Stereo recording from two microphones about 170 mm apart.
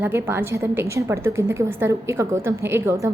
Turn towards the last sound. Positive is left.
turn(degrees=-15)  # may be behind; listen again after turning